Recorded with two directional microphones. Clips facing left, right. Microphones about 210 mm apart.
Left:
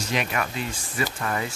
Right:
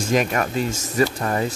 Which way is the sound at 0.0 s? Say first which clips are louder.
Right 7 dB; 45° right (ahead or behind).